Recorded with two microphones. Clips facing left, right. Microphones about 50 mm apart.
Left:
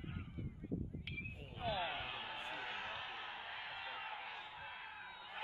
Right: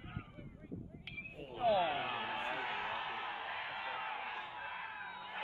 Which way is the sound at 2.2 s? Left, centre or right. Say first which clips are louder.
Right 7 dB; right.